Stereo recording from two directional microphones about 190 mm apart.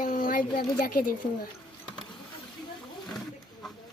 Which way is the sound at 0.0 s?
45° left (ahead or behind).